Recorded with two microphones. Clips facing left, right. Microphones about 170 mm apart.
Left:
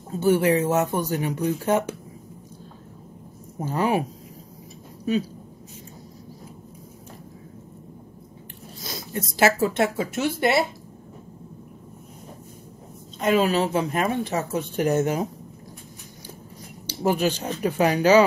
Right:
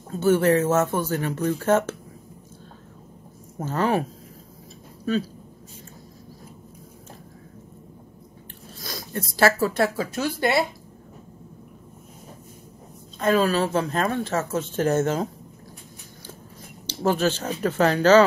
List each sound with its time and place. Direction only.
0.1 s speech: 15° left (ahead or behind)
3.5 s speech: 10° left (ahead or behind)
8.8 s speech: 20° left (ahead or behind)
13.2 s speech: 15° left (ahead or behind)
16.8 s speech: 15° left (ahead or behind)